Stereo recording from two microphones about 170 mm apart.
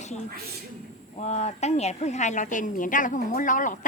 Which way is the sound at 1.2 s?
40° left (ahead or behind).